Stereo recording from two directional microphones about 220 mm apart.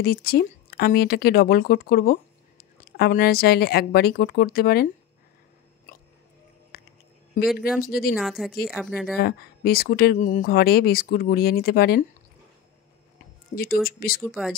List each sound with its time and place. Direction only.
0.0 s speech: 45° left (ahead or behind)
6.7 s music: 40° left (ahead or behind)
7.8 s speech: 40° left (ahead or behind)
8.2 s speech: centre (ahead or behind)
9.1 s speech: 45° left (ahead or behind)
13.6 s speech: 40° left (ahead or behind)